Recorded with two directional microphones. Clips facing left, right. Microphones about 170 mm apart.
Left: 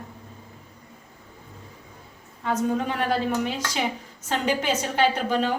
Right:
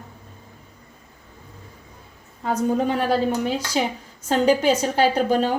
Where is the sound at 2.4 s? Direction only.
35° right (ahead or behind).